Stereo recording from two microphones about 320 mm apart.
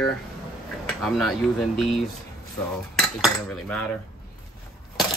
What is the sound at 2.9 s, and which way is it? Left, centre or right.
Cutlery, centre.